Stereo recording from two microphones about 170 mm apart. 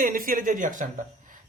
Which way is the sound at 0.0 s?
55° right (ahead or behind).